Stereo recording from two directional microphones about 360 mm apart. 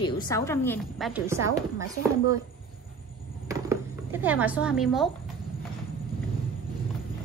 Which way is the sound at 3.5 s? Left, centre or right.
Centre.